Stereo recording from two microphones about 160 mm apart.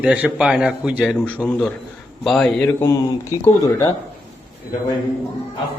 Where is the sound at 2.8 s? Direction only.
15° left (ahead or behind).